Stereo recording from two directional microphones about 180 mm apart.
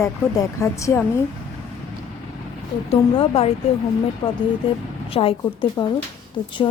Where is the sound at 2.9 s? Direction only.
30° left (ahead or behind).